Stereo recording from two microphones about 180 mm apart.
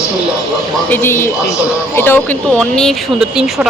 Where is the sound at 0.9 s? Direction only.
15° left (ahead or behind).